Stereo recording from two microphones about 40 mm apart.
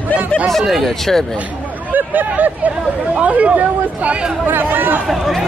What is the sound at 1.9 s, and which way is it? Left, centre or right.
Speech, right.